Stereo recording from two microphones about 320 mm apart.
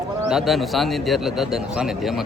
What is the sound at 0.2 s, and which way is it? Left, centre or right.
A man's voice, centre.